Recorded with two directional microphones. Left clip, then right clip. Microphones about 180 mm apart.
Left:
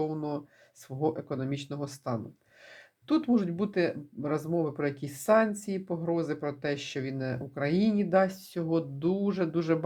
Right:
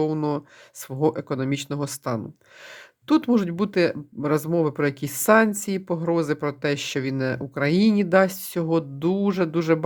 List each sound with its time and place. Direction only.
0.0 s speech: 40° right (ahead or behind)